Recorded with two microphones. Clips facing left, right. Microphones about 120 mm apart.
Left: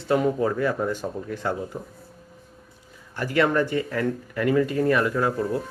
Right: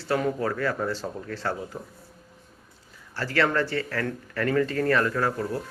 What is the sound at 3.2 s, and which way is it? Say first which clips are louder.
Speech: left 3 dB; 15° left (ahead or behind).